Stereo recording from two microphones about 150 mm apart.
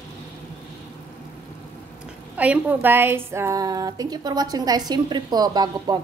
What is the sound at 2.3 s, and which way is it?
A woman's voice, 10° right (ahead or behind).